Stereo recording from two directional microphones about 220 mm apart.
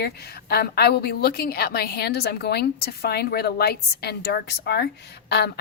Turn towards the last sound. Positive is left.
turn(degrees=50)  # may be behind; listen again after turning